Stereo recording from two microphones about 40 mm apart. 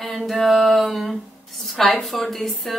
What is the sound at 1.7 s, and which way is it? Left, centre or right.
Speech, centre.